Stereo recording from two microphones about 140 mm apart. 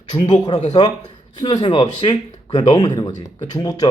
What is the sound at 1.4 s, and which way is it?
Speech, 35° left (ahead or behind).